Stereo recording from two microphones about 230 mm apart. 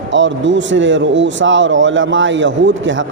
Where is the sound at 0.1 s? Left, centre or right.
Right.